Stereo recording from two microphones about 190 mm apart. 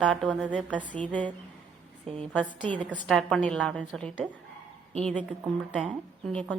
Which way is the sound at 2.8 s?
5° right (ahead or behind).